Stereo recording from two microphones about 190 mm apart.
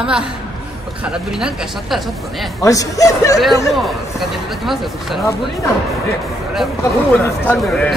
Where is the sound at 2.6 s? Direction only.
15° left (ahead or behind).